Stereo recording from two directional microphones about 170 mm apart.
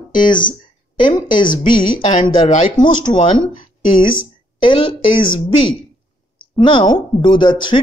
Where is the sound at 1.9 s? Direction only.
45° left (ahead or behind).